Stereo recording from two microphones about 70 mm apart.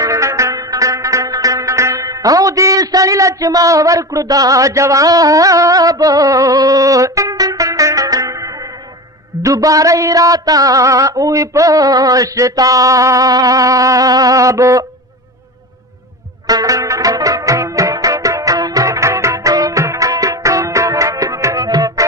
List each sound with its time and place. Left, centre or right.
0.0 s music: right
9.4 s a sound: right
16.5 s music: right